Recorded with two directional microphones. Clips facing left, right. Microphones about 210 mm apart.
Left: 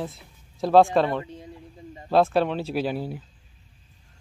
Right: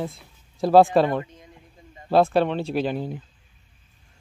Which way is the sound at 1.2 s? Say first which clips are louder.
Left 8 dB; 30° left (ahead or behind).